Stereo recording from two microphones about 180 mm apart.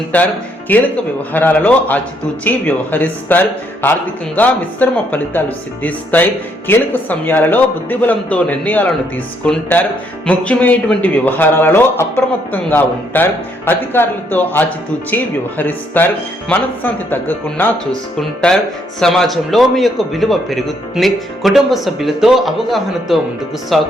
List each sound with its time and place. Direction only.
0.1 s a man's voice: 10° left (ahead or behind)